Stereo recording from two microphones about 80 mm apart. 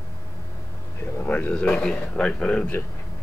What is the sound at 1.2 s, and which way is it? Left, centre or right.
A man's voice, left.